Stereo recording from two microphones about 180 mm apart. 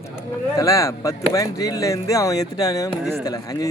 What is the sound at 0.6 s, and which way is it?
Speech, 15° left (ahead or behind).